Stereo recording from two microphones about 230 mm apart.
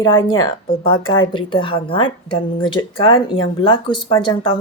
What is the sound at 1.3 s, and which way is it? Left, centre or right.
Speech, left.